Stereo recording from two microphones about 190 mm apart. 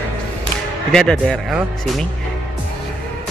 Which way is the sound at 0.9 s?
5° left (ahead or behind).